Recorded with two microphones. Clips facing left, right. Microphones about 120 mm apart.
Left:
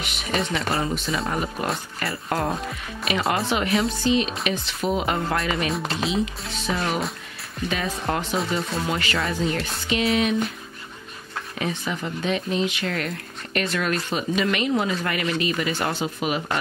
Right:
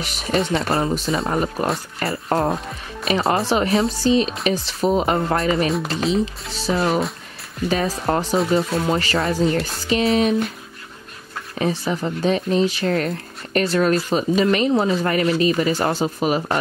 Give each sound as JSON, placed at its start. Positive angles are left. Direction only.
{"t": 0.0, "sound": "speech", "side_deg": -35}
{"t": 5.7, "sound": "speech", "side_deg": 0}
{"t": 7.7, "sound": "speech", "side_deg": -35}
{"t": 11.5, "sound": "speech", "side_deg": -35}